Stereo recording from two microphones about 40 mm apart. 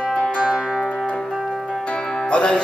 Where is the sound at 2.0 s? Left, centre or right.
Left.